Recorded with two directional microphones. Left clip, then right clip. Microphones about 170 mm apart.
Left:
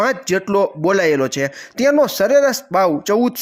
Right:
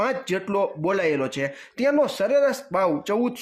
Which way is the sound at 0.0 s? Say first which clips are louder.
Left 7 dB; 30° left (ahead or behind).